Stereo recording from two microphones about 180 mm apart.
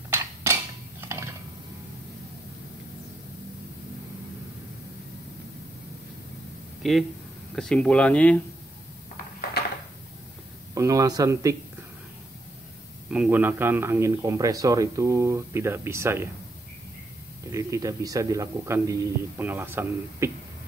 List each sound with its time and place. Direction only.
0.1 s a sound: 15° right (ahead or behind)
6.8 s a sound: centre (ahead or behind)
7.5 s speech: 5° left (ahead or behind)
10.7 s speech: 20° right (ahead or behind)
13.1 s speech: 10° right (ahead or behind)
17.5 s speech: 20° right (ahead or behind)